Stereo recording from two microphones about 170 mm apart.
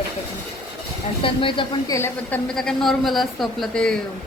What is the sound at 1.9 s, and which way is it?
Speech, 15° left (ahead or behind).